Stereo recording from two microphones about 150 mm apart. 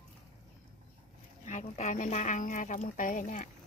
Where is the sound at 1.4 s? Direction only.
50° left (ahead or behind).